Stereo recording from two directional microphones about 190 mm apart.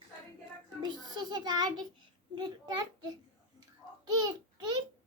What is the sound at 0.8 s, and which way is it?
A child's voice, 20° right (ahead or behind).